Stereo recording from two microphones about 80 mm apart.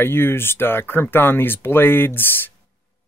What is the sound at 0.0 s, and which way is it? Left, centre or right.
Speech, left.